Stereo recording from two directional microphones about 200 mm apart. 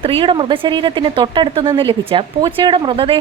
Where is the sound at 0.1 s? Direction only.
25° right (ahead or behind).